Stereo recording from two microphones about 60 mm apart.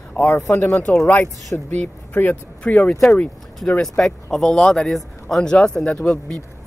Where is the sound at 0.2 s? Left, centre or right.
Centre.